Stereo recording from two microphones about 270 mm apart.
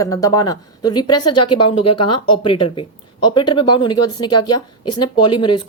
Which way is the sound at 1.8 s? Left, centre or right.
Left.